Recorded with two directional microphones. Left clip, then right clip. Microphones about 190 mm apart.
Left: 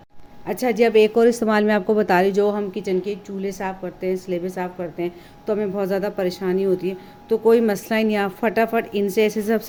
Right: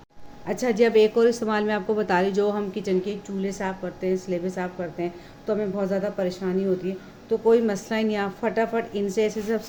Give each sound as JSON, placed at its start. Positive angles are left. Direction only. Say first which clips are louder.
{"t": 0.4, "sound": "a woman's voice", "louder": "left 3 dB", "side_deg": 30}
{"t": 5.5, "sound": "a woman's voice", "louder": "left 4 dB", "side_deg": 50}